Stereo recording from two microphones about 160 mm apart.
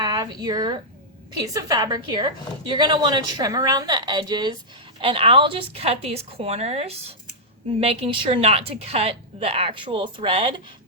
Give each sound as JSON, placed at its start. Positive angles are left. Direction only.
{"t": 0.0, "sound": "a woman's voice", "side_deg": -25}